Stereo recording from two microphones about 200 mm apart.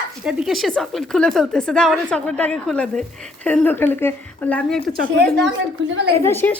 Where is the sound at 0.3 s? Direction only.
5° right (ahead or behind).